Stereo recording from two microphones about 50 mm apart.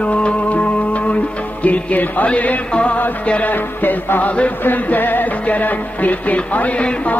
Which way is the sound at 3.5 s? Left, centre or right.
Left.